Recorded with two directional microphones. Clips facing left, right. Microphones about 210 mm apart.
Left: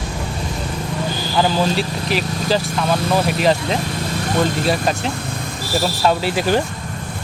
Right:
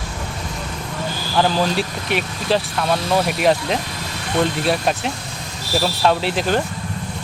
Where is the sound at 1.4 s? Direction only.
Centre (ahead or behind).